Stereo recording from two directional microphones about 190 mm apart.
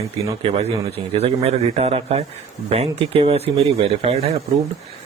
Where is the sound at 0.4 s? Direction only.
30° right (ahead or behind).